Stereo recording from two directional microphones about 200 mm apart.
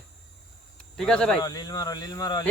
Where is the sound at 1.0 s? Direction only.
5° left (ahead or behind).